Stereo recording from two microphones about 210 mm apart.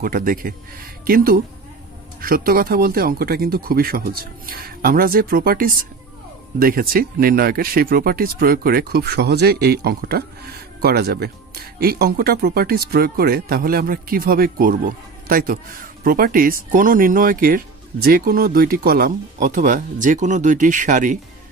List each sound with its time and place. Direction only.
0.0 s speech: 40° right (ahead or behind)